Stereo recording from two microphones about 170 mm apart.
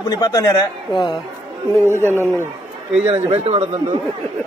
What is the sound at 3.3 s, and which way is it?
Speech, 35° right (ahead or behind).